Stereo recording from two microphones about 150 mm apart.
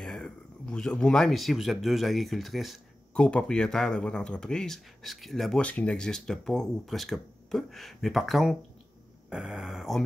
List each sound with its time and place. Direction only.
0.0 s speech: 5° left (ahead or behind)